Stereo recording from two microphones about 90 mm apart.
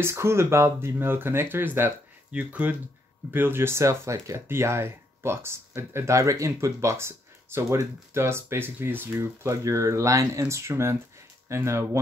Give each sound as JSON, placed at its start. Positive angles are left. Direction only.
{"t": 0.0, "sound": "speech", "side_deg": -30}